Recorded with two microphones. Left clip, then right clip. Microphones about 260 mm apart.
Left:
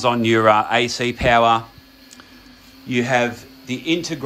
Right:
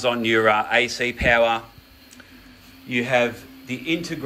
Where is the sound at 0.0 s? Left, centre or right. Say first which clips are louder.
Left 3 dB; left.